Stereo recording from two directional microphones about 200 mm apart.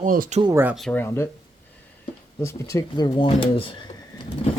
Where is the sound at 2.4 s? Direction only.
15° left (ahead or behind).